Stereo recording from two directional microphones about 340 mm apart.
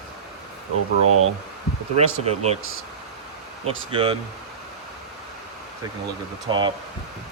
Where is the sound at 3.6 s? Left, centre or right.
Centre.